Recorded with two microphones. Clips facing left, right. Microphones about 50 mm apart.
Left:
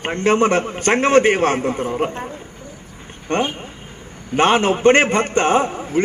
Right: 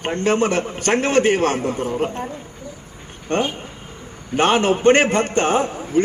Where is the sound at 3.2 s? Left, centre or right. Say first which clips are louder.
Left 1 dB; left.